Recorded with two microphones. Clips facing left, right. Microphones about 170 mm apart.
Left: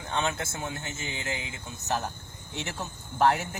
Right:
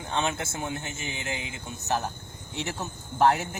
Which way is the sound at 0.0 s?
20° right (ahead or behind).